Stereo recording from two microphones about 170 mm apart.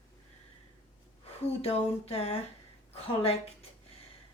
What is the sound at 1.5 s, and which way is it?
Speech, 35° left (ahead or behind).